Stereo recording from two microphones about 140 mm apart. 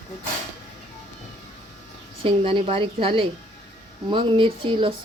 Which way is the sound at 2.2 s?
40° right (ahead or behind).